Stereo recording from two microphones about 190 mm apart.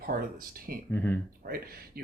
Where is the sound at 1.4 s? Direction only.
50° right (ahead or behind).